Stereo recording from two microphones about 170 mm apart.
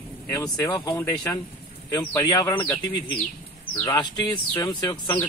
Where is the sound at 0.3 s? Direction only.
20° left (ahead or behind).